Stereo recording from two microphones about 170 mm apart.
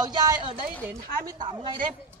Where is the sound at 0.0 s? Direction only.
25° right (ahead or behind).